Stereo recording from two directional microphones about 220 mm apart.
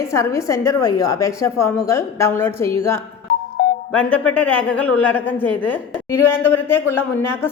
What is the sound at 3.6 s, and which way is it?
Music, 50° left (ahead or behind).